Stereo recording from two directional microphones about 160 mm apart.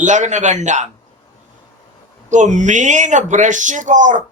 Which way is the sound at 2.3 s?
50° right (ahead or behind).